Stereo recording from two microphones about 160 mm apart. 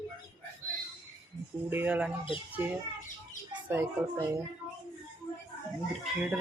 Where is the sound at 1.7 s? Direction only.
10° right (ahead or behind).